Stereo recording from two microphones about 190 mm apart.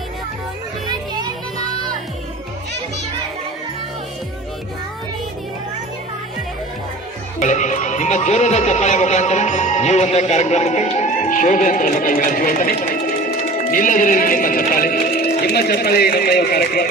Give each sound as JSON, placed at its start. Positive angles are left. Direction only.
{"t": 7.3, "sound": "speech", "side_deg": 40}